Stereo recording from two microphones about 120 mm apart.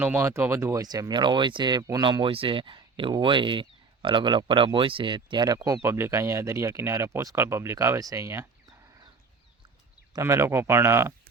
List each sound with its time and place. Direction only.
0.0 s speech: 20° right (ahead or behind); by 5.5 s 40° right (ahead or behind)
5.5 s speech: 25° right (ahead or behind)
10.1 s speech: 25° right (ahead or behind)